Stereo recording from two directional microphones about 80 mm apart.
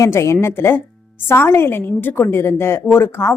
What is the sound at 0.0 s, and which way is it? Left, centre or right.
A woman's voice, left.